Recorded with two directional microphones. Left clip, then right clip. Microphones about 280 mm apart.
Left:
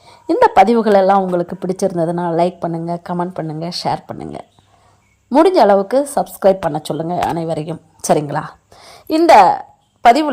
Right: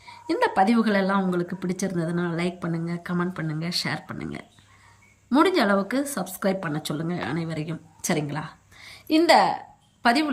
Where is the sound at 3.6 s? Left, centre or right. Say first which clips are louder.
Left 9 dB; centre.